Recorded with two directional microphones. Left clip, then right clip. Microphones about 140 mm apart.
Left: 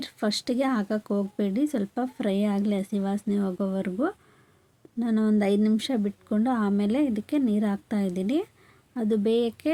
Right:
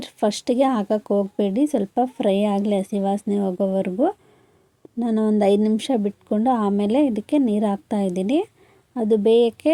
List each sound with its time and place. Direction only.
0.0 s speech: 15° right (ahead or behind)
4.9 s speech: 15° right (ahead or behind)